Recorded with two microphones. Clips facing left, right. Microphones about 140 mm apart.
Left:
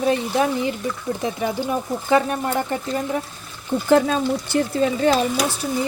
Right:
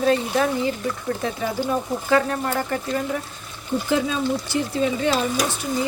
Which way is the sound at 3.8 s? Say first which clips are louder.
Left 6 dB; 55° left (ahead or behind).